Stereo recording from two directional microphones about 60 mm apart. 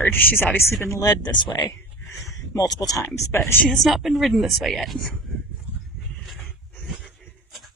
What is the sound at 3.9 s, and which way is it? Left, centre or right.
A woman's voice, centre.